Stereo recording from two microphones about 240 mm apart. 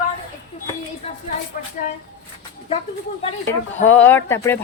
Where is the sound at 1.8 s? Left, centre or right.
Left.